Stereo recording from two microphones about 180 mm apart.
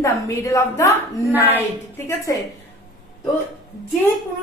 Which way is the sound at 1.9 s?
15° left (ahead or behind).